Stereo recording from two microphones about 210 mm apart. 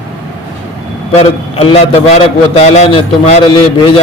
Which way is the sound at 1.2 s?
30° left (ahead or behind).